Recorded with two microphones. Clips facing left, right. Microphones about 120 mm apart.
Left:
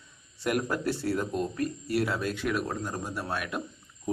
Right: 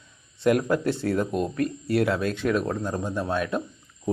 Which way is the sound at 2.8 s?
20° right (ahead or behind).